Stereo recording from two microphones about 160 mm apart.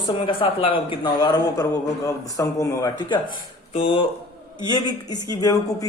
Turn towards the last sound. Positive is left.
turn(degrees=25)  # may be behind; listen again after turning